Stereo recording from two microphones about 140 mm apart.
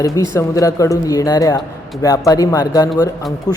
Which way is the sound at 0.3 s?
25° left (ahead or behind).